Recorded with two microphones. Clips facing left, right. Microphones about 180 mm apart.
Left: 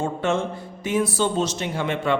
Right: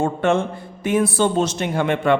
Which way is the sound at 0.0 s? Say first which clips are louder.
Right 4 dB; 55° right (ahead or behind).